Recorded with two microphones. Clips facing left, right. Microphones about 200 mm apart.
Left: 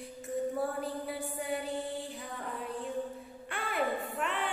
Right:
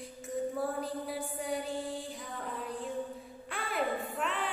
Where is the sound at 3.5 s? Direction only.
Centre (ahead or behind).